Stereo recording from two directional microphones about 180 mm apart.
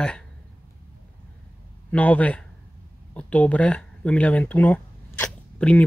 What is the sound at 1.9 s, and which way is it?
Speech, 10° left (ahead or behind).